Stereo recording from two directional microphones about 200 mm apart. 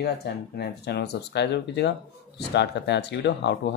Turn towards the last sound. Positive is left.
turn(degrees=60)  # may be behind; listen again after turning